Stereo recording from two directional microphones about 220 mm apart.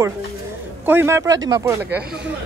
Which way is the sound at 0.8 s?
10° right (ahead or behind).